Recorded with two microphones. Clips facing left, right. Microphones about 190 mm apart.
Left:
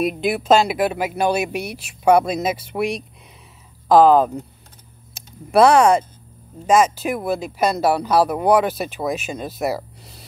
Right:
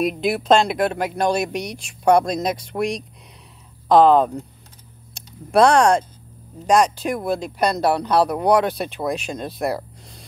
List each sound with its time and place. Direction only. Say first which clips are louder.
0.0 s speech: even; centre (ahead or behind)